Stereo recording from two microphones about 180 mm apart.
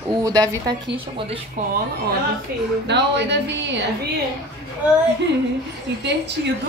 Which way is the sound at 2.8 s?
70° right (ahead or behind).